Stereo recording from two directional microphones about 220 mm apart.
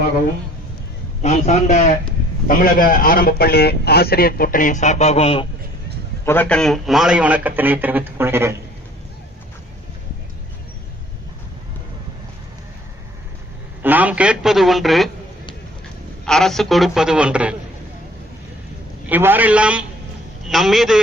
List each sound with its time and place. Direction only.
1.2 s a man's voice: 30° left (ahead or behind)
6.2 s a man's voice: 10° left (ahead or behind); by 8.5 s 10° right (ahead or behind)
13.8 s a man's voice: 5° right (ahead or behind)
16.2 s a man's voice: centre (ahead or behind)
19.0 s a man's voice: 10° right (ahead or behind)